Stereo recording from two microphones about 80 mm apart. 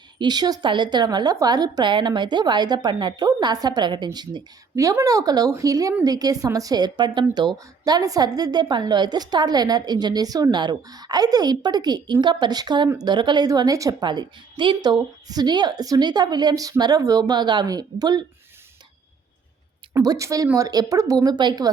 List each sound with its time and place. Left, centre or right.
0.2 s speech: right
4.7 s speech: right
10.6 s speech: right
13.5 s speech: right
14.0 s a woman's voice: right
15.3 s speech: right
20.0 s speech: right
21.2 s speech: right